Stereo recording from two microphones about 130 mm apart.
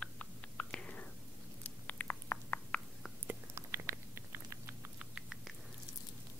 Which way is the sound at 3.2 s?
20° right (ahead or behind).